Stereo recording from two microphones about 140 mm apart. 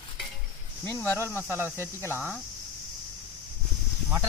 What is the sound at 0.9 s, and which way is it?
Speech, 15° left (ahead or behind).